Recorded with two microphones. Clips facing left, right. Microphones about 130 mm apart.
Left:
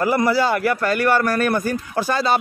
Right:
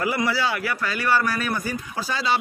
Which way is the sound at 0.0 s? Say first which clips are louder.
Left 6 dB; 45° left (ahead or behind).